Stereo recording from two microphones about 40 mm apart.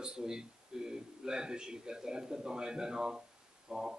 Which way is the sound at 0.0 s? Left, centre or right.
Centre.